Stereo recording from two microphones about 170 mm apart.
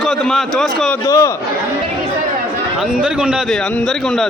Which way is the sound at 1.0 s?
15° left (ahead or behind).